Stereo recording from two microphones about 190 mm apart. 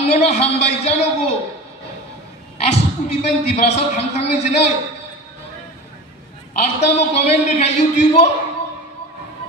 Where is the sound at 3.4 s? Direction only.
35° left (ahead or behind).